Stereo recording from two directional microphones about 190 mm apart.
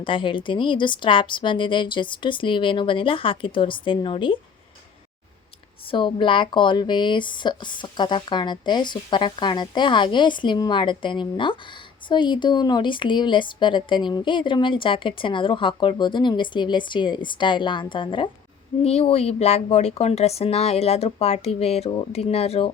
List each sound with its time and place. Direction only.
0.0 s speech: 25° left (ahead or behind)
5.9 s speech: 25° left (ahead or behind)